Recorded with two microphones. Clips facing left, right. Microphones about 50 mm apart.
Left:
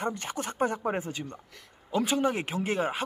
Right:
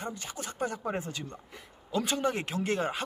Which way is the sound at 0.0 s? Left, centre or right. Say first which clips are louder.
Left 6 dB; left.